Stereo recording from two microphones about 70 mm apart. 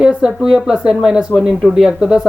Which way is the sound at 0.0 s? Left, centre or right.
Centre.